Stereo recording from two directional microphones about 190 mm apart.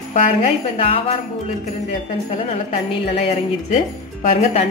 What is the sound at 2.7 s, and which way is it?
Speech, 35° left (ahead or behind).